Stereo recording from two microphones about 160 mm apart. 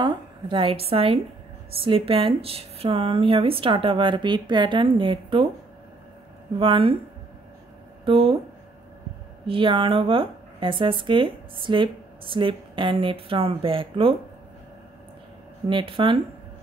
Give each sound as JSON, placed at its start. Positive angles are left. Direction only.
{"t": 0.0, "sound": "a woman's voice", "side_deg": -30}
{"t": 6.6, "sound": "a woman's voice", "side_deg": -35}
{"t": 8.0, "sound": "speech", "side_deg": -35}
{"t": 9.5, "sound": "a woman's voice", "side_deg": -30}
{"t": 15.7, "sound": "a woman's voice", "side_deg": -30}